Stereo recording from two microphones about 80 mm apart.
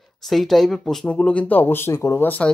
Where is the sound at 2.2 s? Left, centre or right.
Centre.